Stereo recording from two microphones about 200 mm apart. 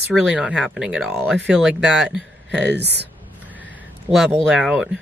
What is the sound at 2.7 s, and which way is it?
Speech, 55° right (ahead or behind).